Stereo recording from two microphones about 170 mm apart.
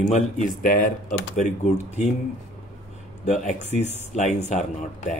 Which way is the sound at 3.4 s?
45° left (ahead or behind).